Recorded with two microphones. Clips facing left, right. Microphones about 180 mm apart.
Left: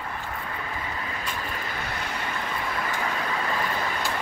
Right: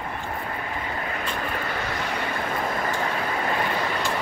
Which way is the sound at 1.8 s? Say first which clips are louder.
Right 4 dB; 65° right (ahead or behind).